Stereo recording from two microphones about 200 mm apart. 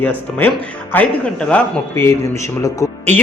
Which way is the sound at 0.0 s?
10° left (ahead or behind).